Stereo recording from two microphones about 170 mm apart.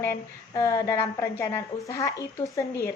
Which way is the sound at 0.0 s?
15° left (ahead or behind).